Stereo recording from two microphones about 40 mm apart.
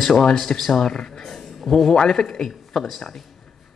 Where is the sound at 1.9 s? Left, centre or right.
Centre.